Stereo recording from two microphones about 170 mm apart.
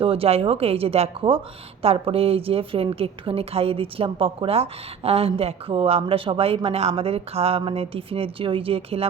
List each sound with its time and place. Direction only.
0.0 s a woman's voice: 35° right (ahead or behind)